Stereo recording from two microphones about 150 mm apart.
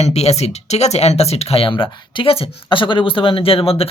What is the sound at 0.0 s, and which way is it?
Speech, 45° left (ahead or behind).